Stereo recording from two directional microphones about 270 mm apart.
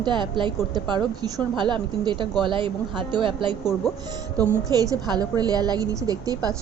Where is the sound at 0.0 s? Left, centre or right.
Centre.